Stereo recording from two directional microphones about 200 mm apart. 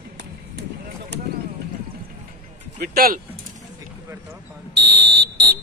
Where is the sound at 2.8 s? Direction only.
50° right (ahead or behind).